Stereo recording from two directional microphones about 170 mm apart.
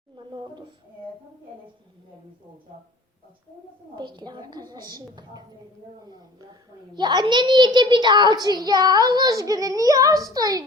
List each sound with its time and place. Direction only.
3.9 s a child's voice: 25° right (ahead or behind)